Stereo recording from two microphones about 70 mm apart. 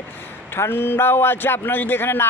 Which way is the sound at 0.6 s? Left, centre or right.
Left.